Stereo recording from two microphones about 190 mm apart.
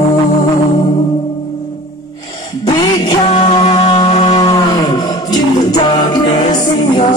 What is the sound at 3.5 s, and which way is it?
Music, 30° left (ahead or behind).